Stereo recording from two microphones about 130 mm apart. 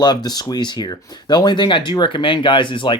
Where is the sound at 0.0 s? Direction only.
30° left (ahead or behind).